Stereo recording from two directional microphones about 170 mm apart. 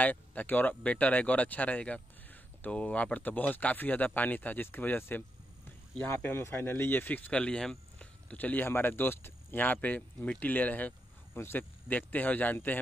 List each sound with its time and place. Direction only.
0.0 s speech: 10° left (ahead or behind)